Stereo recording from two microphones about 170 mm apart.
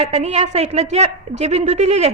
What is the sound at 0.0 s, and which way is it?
A woman's voice, 40° right (ahead or behind).